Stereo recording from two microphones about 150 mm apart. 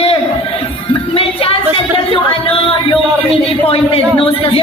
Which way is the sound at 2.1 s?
35° left (ahead or behind).